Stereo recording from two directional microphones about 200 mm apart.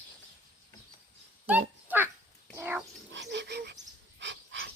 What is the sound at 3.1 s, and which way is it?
Wheeze, 60° right (ahead or behind).